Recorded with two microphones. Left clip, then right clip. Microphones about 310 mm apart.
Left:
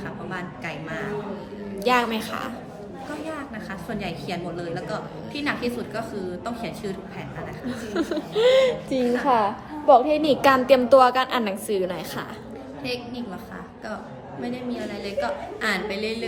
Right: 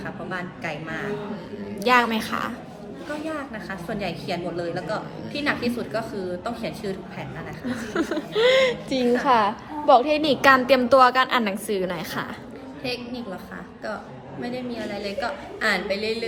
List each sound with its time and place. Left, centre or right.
0.0 s a woman's voice: centre
1.8 s speech: right
3.2 s a woman's voice: centre
7.7 s speech: right
12.8 s a woman's voice: centre
14.4 s a woman's voice: centre